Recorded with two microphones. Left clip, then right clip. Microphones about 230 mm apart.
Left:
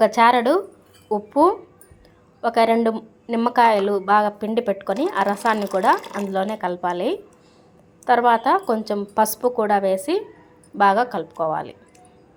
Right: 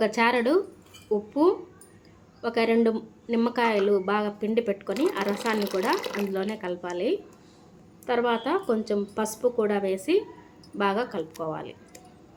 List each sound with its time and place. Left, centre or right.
0.0 s a woman's voice: centre